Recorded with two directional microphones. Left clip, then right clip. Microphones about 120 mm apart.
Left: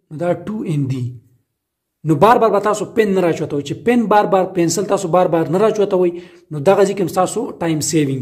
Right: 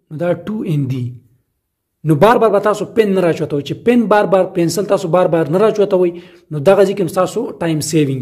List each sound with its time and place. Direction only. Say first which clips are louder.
0.1 s a man's voice: right 2 dB; 20° right (ahead or behind)